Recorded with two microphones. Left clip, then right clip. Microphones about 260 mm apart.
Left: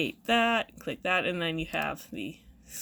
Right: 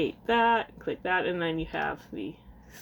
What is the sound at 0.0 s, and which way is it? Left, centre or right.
Speech, left.